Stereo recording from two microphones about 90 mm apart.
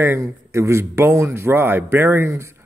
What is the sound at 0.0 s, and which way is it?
A man's voice, 30° right (ahead or behind).